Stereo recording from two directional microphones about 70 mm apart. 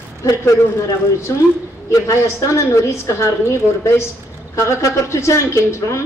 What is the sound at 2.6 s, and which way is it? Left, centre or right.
A woman's voice, left.